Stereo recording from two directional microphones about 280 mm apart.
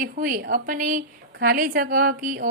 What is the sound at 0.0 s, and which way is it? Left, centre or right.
A woman's voice, right.